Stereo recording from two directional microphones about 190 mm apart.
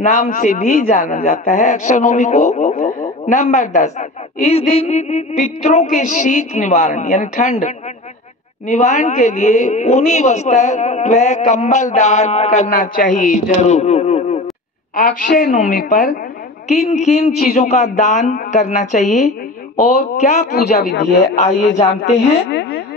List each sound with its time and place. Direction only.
0.0 s a man's voice: 40° left (ahead or behind)
15.0 s a woman's voice: 45° left (ahead or behind)
16.6 s a man's voice: 35° left (ahead or behind)
20.5 s speech: 60° left (ahead or behind)
22.5 s a sound: 65° left (ahead or behind)